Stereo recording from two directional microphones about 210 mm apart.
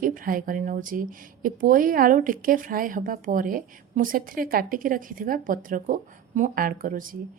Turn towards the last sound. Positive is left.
turn(degrees=-40)  # may be behind; listen again after turning